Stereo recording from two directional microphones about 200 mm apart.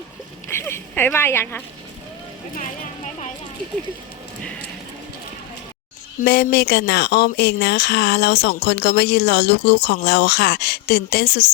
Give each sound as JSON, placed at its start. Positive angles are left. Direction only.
{"t": 0.5, "sound": "speech", "side_deg": 10}
{"t": 6.2, "sound": "speech", "side_deg": 55}